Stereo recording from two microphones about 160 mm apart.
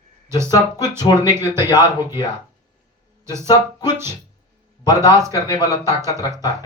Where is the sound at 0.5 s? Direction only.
25° left (ahead or behind).